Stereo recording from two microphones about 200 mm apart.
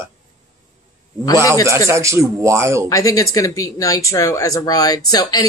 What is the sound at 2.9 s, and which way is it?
Speech, 15° left (ahead or behind).